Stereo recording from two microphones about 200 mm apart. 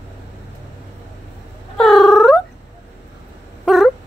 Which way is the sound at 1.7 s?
Centre (ahead or behind).